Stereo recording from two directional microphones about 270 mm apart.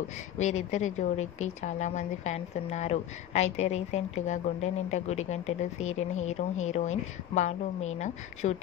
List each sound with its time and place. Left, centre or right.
0.4 s speech: left